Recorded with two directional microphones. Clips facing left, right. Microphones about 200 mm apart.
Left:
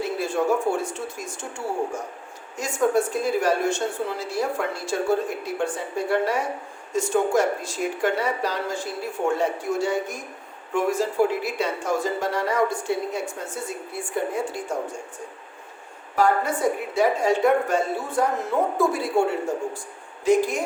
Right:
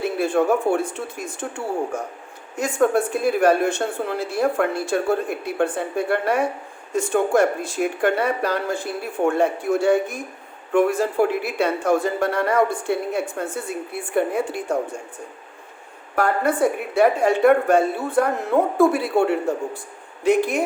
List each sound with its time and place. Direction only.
0.0 s speech: 60° right (ahead or behind)
16.1 s speech: 60° right (ahead or behind)